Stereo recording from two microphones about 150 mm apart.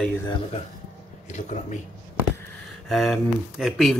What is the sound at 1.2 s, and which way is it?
Speech, 55° left (ahead or behind).